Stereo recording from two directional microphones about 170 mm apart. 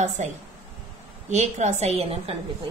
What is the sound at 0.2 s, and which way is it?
A woman's voice, 40° right (ahead or behind).